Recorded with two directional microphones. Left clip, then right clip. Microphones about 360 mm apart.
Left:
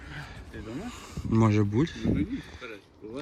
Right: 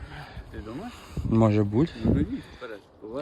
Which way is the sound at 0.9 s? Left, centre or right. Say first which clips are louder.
Right 3 dB; centre.